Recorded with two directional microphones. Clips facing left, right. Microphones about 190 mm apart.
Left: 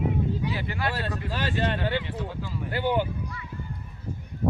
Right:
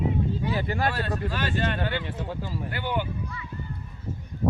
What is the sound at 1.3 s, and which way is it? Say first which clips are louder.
Speech: left 3 dB; 30° left (ahead or behind).